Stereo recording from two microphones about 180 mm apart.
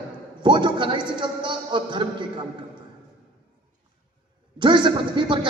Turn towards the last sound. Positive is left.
turn(degrees=-25)  # may be behind; listen again after turning